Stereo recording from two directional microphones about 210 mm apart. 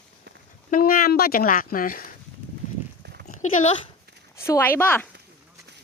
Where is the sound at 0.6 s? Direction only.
40° left (ahead or behind).